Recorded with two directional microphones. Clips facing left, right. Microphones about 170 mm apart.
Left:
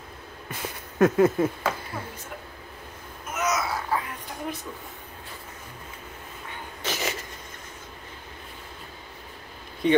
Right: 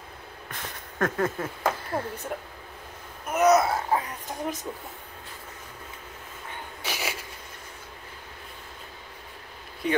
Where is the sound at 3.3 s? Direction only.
60° right (ahead or behind).